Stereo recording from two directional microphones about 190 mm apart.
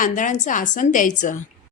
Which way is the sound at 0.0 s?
40° left (ahead or behind).